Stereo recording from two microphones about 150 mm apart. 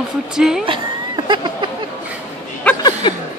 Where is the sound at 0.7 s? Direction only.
30° right (ahead or behind).